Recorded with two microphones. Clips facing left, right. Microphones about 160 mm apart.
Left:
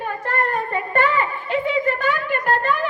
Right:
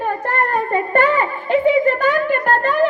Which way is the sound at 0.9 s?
45° right (ahead or behind).